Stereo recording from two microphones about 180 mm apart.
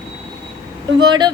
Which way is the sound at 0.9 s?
25° right (ahead or behind).